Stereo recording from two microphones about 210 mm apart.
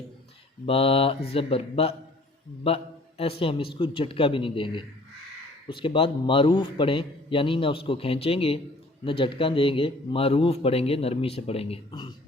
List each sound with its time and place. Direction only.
0.6 s speech: 25° left (ahead or behind)